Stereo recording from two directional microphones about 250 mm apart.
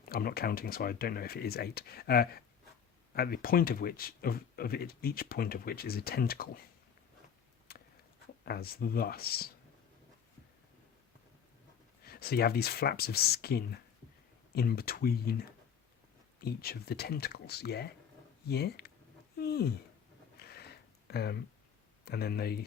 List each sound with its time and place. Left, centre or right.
0.1 s speech: left
7.7 s a sound: left
8.4 s speech: left
12.0 s speech: left
19.4 s a sound: left
22.0 s speech: left